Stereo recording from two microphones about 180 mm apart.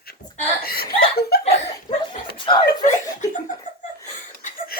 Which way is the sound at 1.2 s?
60° left (ahead or behind).